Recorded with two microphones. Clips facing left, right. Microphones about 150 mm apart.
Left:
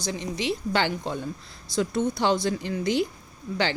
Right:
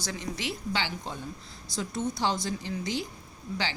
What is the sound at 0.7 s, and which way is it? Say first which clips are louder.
Speech: left 7 dB; 55° left (ahead or behind).